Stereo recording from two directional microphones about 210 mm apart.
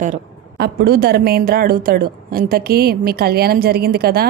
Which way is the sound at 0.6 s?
45° right (ahead or behind).